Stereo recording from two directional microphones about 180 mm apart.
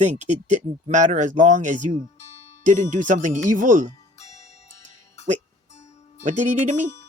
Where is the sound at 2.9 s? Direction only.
45° right (ahead or behind).